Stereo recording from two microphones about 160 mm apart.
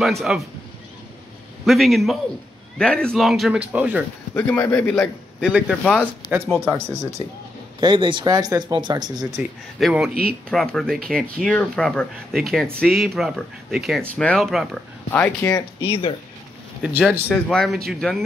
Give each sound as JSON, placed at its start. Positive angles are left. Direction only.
{"t": 0.0, "sound": "speech", "side_deg": 0}
{"t": 1.7, "sound": "speech", "side_deg": 0}
{"t": 4.4, "sound": "speech", "side_deg": 15}
{"t": 5.4, "sound": "speech", "side_deg": -5}
{"t": 6.5, "sound": "speech", "side_deg": 5}
{"t": 6.9, "sound": "speech", "side_deg": -20}
{"t": 7.8, "sound": "speech", "side_deg": -30}
{"t": 9.8, "sound": "speech", "side_deg": 0}
{"t": 15.0, "sound": "speech", "side_deg": 10}
{"t": 15.8, "sound": "speech", "side_deg": 35}
{"t": 16.8, "sound": "speech", "side_deg": -10}
{"t": 17.3, "sound": "speech", "side_deg": 5}